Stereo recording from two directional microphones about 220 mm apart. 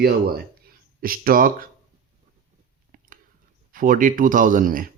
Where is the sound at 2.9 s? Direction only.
40° right (ahead or behind).